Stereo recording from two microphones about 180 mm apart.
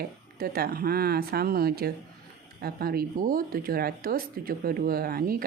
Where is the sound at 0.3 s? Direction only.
55° right (ahead or behind).